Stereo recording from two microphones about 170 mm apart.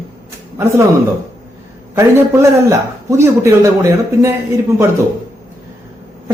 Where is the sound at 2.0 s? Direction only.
15° right (ahead or behind).